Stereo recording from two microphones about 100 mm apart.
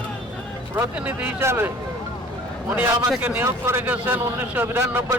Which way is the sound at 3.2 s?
20° right (ahead or behind).